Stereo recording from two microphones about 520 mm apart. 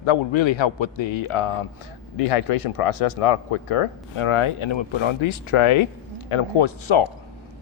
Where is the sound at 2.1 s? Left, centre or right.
Left.